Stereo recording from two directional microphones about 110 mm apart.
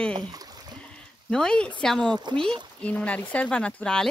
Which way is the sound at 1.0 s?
5° left (ahead or behind).